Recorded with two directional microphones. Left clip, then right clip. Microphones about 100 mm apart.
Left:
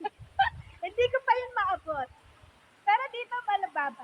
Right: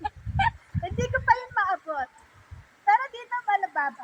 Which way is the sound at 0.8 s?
15° left (ahead or behind).